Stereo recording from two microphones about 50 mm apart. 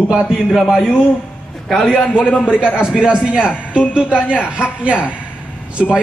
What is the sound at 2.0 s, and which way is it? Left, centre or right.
Speech, left.